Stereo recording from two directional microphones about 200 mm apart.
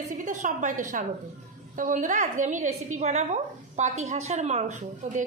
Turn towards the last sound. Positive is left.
turn(degrees=-35)  # may be behind; listen again after turning